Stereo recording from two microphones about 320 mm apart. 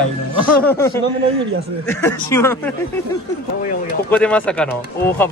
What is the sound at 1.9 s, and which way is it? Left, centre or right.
Speech, centre.